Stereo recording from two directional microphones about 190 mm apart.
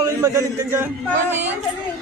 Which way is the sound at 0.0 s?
15° right (ahead or behind).